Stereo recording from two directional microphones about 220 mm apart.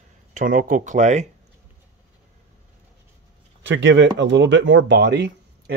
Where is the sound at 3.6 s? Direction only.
55° right (ahead or behind).